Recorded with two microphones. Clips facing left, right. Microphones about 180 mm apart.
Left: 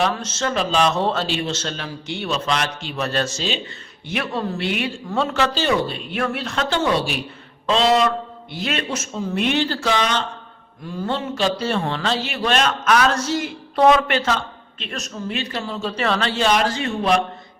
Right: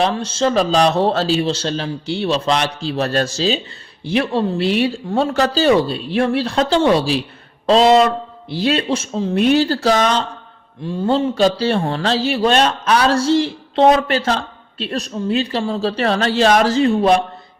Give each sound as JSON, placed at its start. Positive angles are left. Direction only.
{"t": 0.0, "sound": "speech", "side_deg": -30}
{"t": 8.4, "sound": "speech", "side_deg": -30}
{"t": 10.8, "sound": "speech", "side_deg": -30}